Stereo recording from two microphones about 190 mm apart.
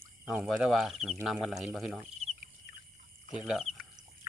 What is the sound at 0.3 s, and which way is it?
Speech, centre (ahead or behind).